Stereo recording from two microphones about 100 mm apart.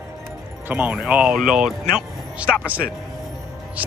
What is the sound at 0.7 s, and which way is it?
Speech, 15° right (ahead or behind).